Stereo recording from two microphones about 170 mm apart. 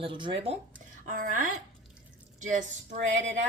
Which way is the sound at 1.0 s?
50° right (ahead or behind).